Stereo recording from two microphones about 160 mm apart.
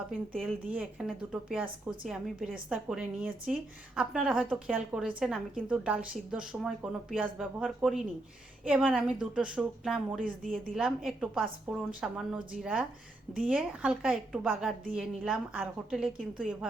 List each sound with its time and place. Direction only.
0.1 s speech: 5° right (ahead or behind)
10.2 s a woman's voice: 55° right (ahead or behind)
10.8 s speech: 5° right (ahead or behind)